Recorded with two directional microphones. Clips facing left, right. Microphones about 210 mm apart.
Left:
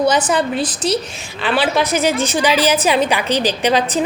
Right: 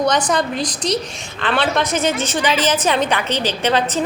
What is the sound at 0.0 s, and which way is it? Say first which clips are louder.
A woman's voice: left 2 dB; 5° left (ahead or behind).